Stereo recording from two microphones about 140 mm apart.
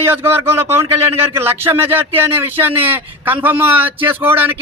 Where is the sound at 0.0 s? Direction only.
15° right (ahead or behind).